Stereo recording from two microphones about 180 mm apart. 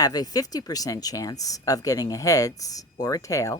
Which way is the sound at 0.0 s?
20° left (ahead or behind).